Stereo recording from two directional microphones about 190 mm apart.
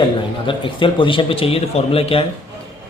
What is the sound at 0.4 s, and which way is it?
Speech, 25° left (ahead or behind).